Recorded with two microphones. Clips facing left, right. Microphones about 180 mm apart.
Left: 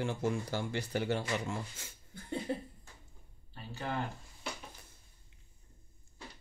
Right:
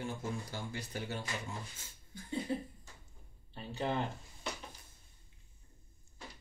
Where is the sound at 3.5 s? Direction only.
20° right (ahead or behind).